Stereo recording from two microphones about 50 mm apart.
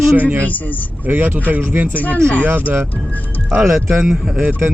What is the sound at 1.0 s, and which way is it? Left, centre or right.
Speech, right.